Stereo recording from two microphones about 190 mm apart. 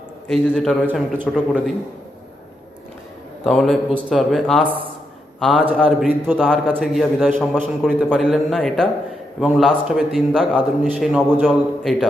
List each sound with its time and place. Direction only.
0.3 s a man's voice: 5° left (ahead or behind)
0.9 s a man's voice: 5° right (ahead or behind)
3.4 s a man's voice: centre (ahead or behind)
11.8 s a man's voice: centre (ahead or behind)